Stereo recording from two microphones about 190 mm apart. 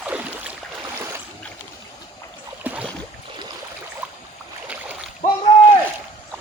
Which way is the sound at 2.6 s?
5° right (ahead or behind).